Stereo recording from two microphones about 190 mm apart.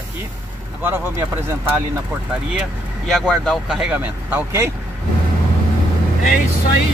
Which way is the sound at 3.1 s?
Centre (ahead or behind).